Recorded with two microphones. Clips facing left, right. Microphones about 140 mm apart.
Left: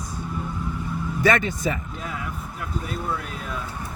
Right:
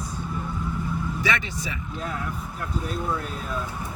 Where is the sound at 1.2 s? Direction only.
50° left (ahead or behind).